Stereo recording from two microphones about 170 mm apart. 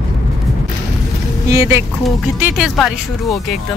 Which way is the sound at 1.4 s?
20° right (ahead or behind).